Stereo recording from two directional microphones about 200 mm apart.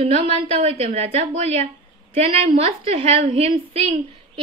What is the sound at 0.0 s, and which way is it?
A woman's voice, 35° right (ahead or behind).